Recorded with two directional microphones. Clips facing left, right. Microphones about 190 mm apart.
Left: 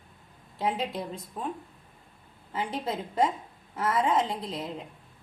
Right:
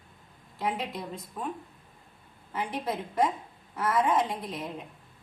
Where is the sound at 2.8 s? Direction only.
25° left (ahead or behind).